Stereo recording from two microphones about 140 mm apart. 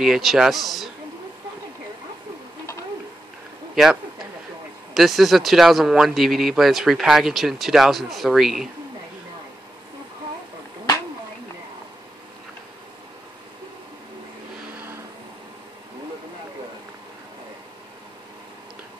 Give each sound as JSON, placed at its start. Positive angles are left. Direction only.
{"t": 0.0, "sound": "speech", "side_deg": 0}
{"t": 3.7, "sound": "a sound", "side_deg": -5}
{"t": 4.9, "sound": "speech", "side_deg": 0}